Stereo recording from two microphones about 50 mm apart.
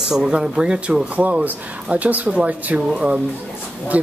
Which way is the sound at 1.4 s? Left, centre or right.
Right.